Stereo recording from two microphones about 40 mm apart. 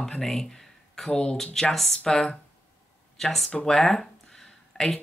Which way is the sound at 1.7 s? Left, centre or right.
Centre.